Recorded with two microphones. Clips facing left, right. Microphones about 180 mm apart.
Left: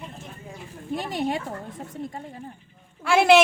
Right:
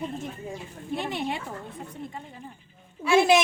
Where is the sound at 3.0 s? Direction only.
70° left (ahead or behind).